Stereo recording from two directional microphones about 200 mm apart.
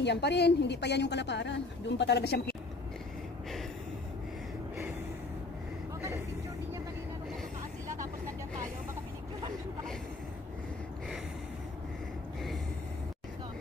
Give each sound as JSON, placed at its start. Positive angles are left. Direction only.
{"t": 0.0, "sound": "a woman's voice", "side_deg": 55}